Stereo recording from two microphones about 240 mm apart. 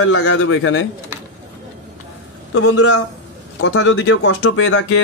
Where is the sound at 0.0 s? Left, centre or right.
Left.